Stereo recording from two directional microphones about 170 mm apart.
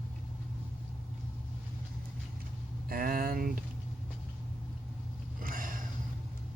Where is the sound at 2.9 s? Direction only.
55° right (ahead or behind).